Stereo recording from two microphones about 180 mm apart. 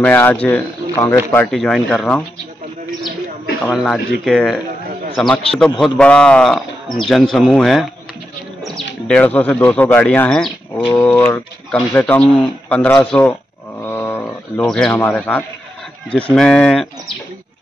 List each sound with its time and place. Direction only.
0.0 s speech: 10° left (ahead or behind)
1.5 s a man's voice: centre (ahead or behind)
3.7 s a man's voice: centre (ahead or behind)
13.8 s wild animals: 10° left (ahead or behind)
15.0 s a man's voice: 5° left (ahead or behind)